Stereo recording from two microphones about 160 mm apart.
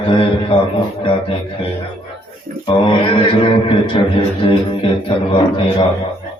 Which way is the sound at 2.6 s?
30° left (ahead or behind).